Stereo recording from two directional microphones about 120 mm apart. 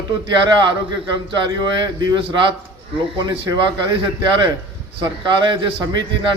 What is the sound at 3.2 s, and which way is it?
Speech, 40° right (ahead or behind).